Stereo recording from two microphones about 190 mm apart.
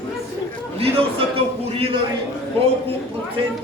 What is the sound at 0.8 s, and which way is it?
A man's voice, 30° right (ahead or behind).